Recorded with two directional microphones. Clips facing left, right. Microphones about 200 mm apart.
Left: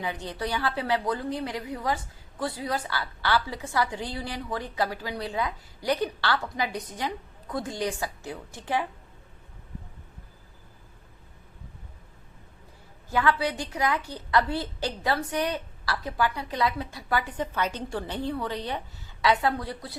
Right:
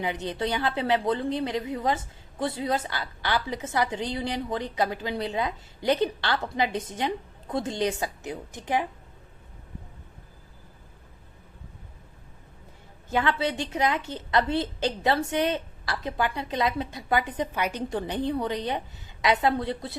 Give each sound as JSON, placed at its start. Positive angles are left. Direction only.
{"t": 0.0, "sound": "a woman's voice", "side_deg": -20}
{"t": 13.1, "sound": "a woman's voice", "side_deg": -20}